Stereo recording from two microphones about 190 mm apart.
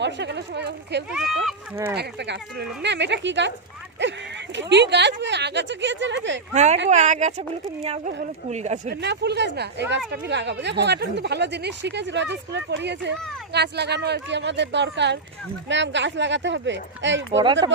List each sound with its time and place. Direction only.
0.0 s speech: 65° right (ahead or behind)
1.1 s speech: centre (ahead or behind)
1.7 s speech: 15° right (ahead or behind)
2.0 s speech: 65° right (ahead or behind)
6.5 s speech: 35° right (ahead or behind)
8.9 s speech: 60° right (ahead or behind)
17.3 s speech: 25° right (ahead or behind)